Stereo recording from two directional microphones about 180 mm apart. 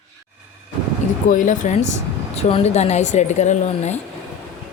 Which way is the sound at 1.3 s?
45° left (ahead or behind).